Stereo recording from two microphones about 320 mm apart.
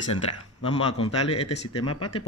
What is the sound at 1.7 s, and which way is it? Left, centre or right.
Speech, left.